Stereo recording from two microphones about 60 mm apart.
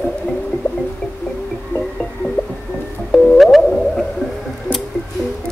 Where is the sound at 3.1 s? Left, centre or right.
Centre.